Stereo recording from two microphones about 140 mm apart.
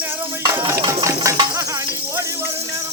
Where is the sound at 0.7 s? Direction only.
20° right (ahead or behind).